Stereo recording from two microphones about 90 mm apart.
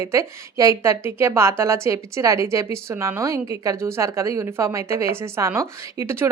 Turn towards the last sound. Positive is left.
turn(degrees=-30)  # may be behind; listen again after turning